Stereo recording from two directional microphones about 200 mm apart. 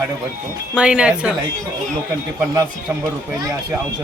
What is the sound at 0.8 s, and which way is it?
Speech, 5° right (ahead or behind).